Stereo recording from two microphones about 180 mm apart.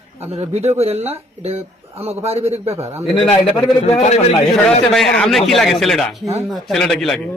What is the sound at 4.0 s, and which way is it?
Speech, 40° left (ahead or behind).